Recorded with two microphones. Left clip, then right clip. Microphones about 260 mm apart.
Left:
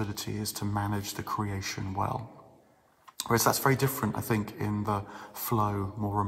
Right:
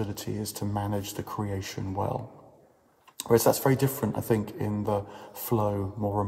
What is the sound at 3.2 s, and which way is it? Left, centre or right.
Speech, left.